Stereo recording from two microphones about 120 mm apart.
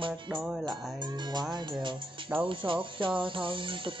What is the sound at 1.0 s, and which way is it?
Speech, 40° right (ahead or behind).